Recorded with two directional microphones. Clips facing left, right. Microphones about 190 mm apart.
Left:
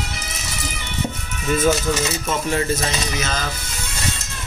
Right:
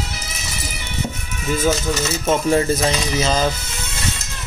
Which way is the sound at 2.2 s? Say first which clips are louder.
Right 10 dB; 30° right (ahead or behind).